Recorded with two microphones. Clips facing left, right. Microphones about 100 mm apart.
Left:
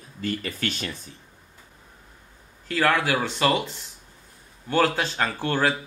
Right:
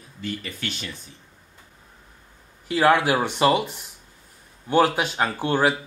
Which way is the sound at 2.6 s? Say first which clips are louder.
Right 4 dB; 15° right (ahead or behind).